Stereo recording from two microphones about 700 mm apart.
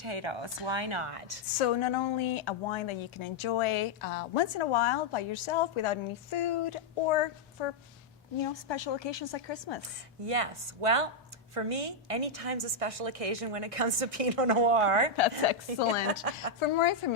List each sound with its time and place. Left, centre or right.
0.0 s a woman's voice: right
1.5 s a woman's voice: left
10.2 s a woman's voice: right
16.6 s speech: left